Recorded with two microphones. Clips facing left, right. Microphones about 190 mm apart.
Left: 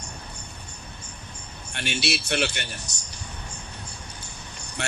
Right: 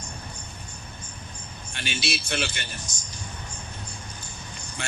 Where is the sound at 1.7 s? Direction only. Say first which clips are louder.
Left 3 dB; 65° left (ahead or behind).